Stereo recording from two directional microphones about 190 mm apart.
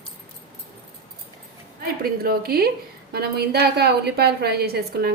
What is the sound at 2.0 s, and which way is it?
A woman's voice, 55° right (ahead or behind).